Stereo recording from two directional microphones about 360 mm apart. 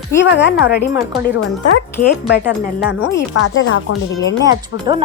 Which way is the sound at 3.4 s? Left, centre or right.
Left.